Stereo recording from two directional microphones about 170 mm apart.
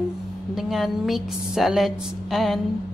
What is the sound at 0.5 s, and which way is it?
A woman's voice, centre (ahead or behind).